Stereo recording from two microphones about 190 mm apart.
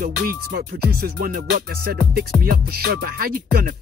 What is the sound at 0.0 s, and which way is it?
Music, 50° right (ahead or behind).